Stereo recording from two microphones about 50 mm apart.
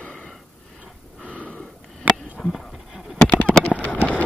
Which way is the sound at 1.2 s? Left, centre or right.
Left.